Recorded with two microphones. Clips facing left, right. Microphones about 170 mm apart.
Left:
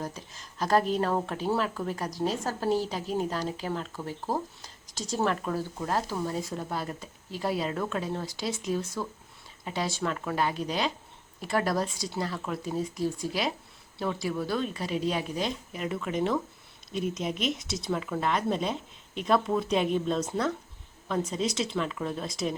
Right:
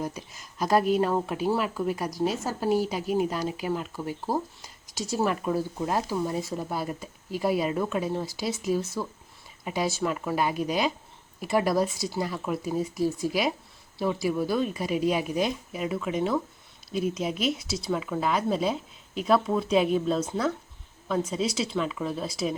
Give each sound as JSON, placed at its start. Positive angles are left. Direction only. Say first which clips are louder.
{"t": 0.0, "sound": "speech", "louder": "right 4 dB", "side_deg": -10}